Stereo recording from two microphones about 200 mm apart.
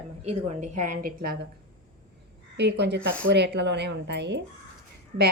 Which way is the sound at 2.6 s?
60° right (ahead or behind).